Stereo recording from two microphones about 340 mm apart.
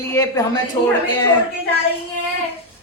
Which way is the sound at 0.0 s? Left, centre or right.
Centre.